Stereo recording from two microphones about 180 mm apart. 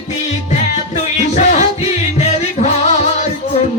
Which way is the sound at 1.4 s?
40° left (ahead or behind).